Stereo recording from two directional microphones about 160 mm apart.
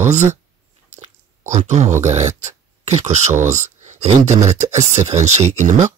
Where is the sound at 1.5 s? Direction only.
45° right (ahead or behind).